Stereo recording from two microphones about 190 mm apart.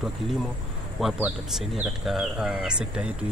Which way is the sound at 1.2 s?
5° right (ahead or behind).